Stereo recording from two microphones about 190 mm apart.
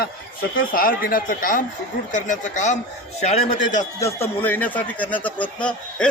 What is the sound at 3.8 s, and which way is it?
Speech, 15° left (ahead or behind).